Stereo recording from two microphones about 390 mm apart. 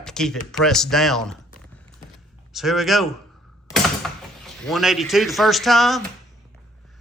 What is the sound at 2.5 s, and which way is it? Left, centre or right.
Speech, centre.